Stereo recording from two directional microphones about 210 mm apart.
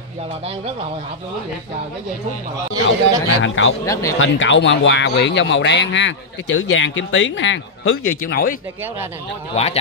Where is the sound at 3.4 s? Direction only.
65° left (ahead or behind).